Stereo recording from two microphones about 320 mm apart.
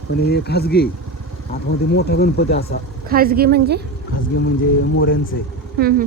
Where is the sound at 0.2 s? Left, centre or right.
Left.